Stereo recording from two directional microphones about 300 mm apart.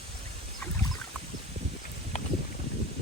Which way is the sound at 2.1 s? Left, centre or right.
Left.